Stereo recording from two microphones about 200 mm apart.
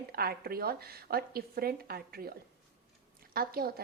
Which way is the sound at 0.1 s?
50° right (ahead or behind).